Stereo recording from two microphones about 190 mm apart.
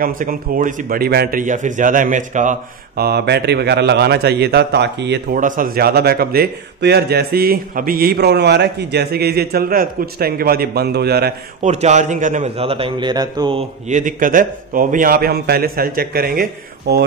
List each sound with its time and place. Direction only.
0.0 s a man's voice: 45° right (ahead or behind)
3.0 s a man's voice: 55° right (ahead or behind)
5.3 s a man's voice: 45° right (ahead or behind)
11.6 s a man's voice: 35° right (ahead or behind); by 17.0 s 55° right (ahead or behind)